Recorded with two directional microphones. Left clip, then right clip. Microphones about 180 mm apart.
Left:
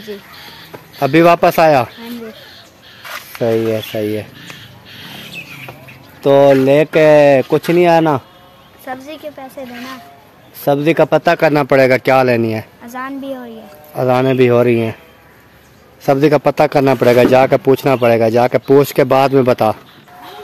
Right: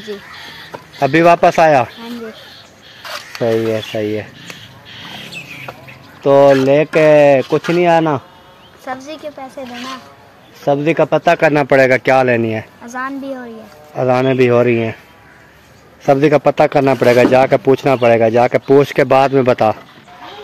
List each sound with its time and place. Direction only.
0.9 s speech: 20° left (ahead or behind)
3.4 s speech: 10° left (ahead or behind)
6.2 s speech: 35° left (ahead or behind)
8.8 s a woman's voice: 5° right (ahead or behind)
10.6 s speech: 35° left (ahead or behind); by 12.6 s 20° left (ahead or behind)
12.8 s speech: 5° left (ahead or behind)
13.9 s speech: 20° left (ahead or behind)
16.1 s speech: 15° left (ahead or behind)